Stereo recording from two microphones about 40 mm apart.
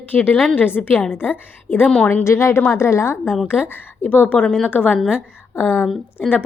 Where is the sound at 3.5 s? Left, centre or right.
Left.